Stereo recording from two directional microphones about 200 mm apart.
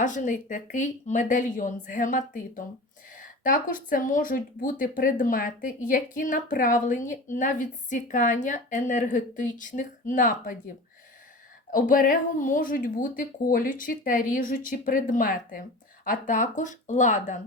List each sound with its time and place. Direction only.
0.0 s a woman's voice: 40° left (ahead or behind)
11.7 s a woman's voice: 45° left (ahead or behind)